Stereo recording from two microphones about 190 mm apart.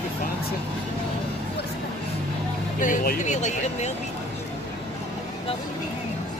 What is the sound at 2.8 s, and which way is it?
Speech, 45° left (ahead or behind).